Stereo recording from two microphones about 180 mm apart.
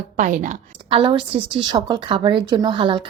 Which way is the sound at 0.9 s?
30° right (ahead or behind).